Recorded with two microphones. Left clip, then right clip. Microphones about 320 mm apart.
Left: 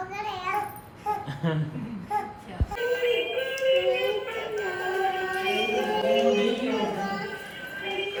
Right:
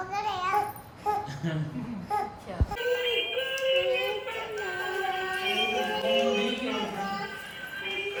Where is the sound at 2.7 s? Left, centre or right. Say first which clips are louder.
Left 3 dB; centre.